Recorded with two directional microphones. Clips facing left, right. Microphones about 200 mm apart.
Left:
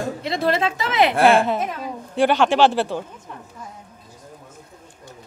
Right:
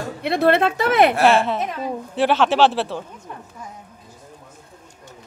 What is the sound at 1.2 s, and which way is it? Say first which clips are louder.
Speech: left 1 dB; centre (ahead or behind).